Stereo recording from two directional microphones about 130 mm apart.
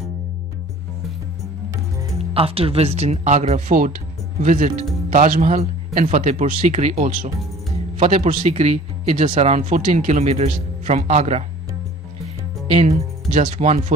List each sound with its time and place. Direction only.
2.1 s speech: 50° right (ahead or behind); by 3.9 s 80° right
4.4 s speech: 70° right (ahead or behind)
5.1 s speech: 80° right; by 7.3 s 60° right (ahead or behind)
8.0 s a man's voice: 50° right (ahead or behind)
12.7 s speech: 65° right (ahead or behind)